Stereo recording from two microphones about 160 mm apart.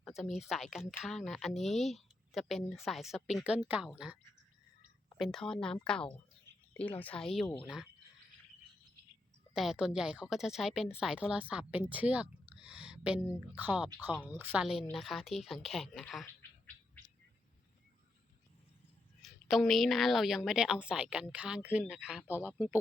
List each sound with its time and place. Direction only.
0.0 s a woman's voice: centre (ahead or behind)
9.6 s a woman's voice: 5° right (ahead or behind)
16.2 s bird: 10° left (ahead or behind)
19.2 s a woman's voice: centre (ahead or behind)